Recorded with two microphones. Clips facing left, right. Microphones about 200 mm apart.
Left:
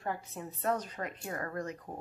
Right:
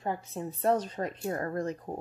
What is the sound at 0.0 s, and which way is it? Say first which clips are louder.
Speech: right 4 dB; 25° right (ahead or behind).